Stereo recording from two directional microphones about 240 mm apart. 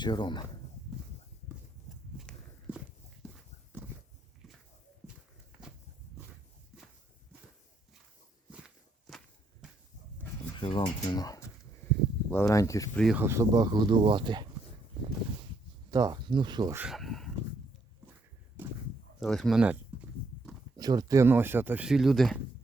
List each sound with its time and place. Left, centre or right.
0.0 s speech: centre
2.1 s walk: centre
3.2 s clip-clop: centre
8.6 s walk: centre
10.6 s speech: centre
13.1 s speech: centre
15.9 s speech: centre
16.8 s speech: centre
19.2 s a sound: centre
20.7 s speech: centre